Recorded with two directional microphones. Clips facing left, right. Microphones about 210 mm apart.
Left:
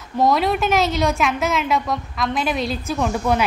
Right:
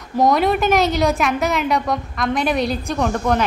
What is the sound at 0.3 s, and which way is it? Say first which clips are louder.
A woman's voice: right 3 dB; centre (ahead or behind).